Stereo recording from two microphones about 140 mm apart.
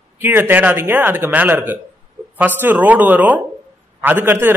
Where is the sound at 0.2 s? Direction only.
15° right (ahead or behind).